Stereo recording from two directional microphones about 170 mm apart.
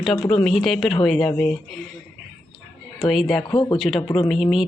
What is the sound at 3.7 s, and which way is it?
Speech, centre (ahead or behind).